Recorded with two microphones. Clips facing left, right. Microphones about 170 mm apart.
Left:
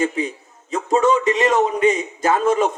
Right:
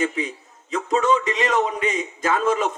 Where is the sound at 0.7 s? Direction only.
35° left (ahead or behind).